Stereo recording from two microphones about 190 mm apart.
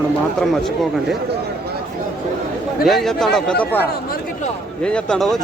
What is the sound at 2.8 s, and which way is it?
Speech, centre (ahead or behind).